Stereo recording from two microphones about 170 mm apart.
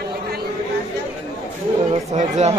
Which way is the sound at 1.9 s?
40° right (ahead or behind).